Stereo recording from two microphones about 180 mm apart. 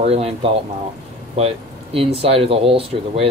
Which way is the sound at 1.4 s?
35° right (ahead or behind).